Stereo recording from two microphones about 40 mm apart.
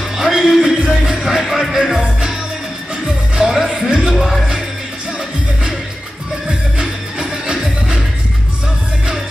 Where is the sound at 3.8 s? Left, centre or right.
Centre.